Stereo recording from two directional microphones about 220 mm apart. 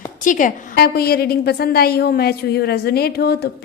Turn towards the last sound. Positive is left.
turn(degrees=45)  # may be behind; listen again after turning